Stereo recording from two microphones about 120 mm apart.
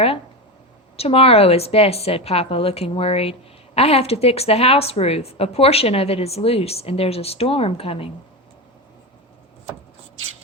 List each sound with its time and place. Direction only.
0.9 s a woman's voice: 55° left (ahead or behind)